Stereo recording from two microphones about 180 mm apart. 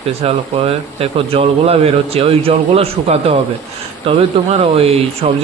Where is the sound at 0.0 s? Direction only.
35° right (ahead or behind).